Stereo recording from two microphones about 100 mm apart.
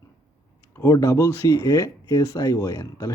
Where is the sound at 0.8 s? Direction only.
30° left (ahead or behind).